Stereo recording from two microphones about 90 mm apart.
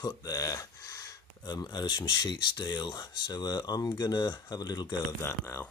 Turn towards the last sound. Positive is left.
turn(degrees=30)  # may be behind; listen again after turning